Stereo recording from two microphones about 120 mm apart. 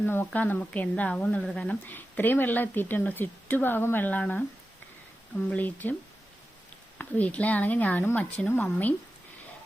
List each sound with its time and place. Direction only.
0.0 s a woman's voice: 15° left (ahead or behind)
5.5 s a woman's voice: 15° left (ahead or behind)
7.0 s a woman's voice: 10° left (ahead or behind)